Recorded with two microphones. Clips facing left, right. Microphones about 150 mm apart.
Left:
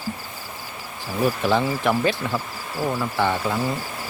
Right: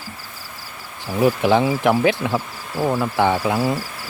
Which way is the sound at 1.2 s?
15° right (ahead or behind).